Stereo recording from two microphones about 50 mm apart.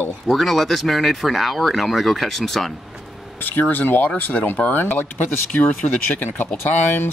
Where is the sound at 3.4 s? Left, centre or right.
Left.